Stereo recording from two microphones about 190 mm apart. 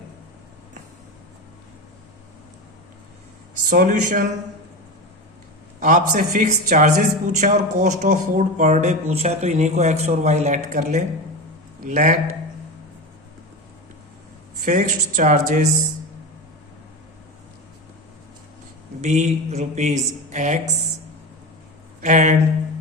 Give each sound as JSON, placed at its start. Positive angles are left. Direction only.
{"t": 3.7, "sound": "speech", "side_deg": -50}
{"t": 5.8, "sound": "a man's voice", "side_deg": -40}
{"t": 14.6, "sound": "a man's voice", "side_deg": -40}
{"t": 19.0, "sound": "a man's voice", "side_deg": -35}
{"t": 22.0, "sound": "a man's voice", "side_deg": -40}